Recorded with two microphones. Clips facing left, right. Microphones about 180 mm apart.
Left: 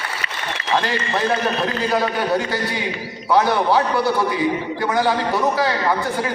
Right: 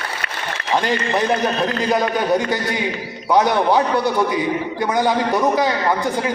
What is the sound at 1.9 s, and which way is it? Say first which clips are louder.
A man's voice: right 3 dB; 20° right (ahead or behind).